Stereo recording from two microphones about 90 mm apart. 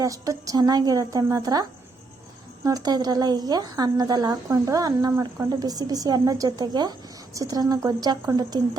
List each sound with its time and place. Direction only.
0.0 s speech: 40° right (ahead or behind)
2.6 s speech: 45° right (ahead or behind)